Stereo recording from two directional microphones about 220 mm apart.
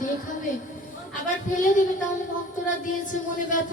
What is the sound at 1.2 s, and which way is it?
Speech, 35° left (ahead or behind).